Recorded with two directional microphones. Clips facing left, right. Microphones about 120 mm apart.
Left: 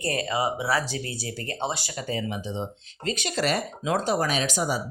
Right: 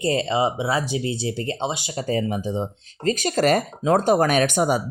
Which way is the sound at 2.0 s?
40° right (ahead or behind).